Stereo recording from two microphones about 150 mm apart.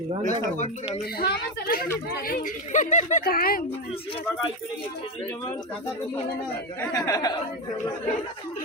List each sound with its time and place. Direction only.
1.2 s a woman's voice: 85° left; by 3.2 s 55° left (ahead or behind)
3.2 s speech: 75° left (ahead or behind)
6.9 s speech: 20° left (ahead or behind)